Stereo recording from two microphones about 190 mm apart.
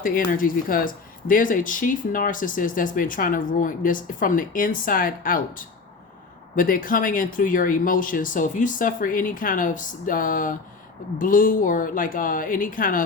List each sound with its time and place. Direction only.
0.0 s speech: 50° left (ahead or behind)